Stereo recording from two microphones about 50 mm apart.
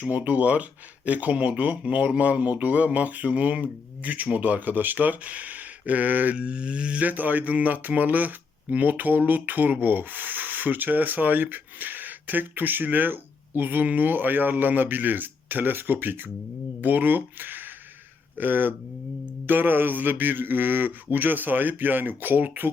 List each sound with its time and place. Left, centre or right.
0.0 s rub: right
6.3 s rub: right